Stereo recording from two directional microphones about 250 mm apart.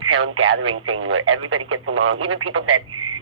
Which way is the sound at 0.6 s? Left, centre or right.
Right.